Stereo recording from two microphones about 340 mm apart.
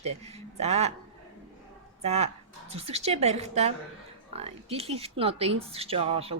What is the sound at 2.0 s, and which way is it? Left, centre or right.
Speech, centre.